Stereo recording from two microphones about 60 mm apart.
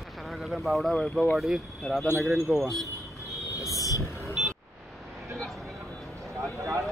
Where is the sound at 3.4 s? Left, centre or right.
Left.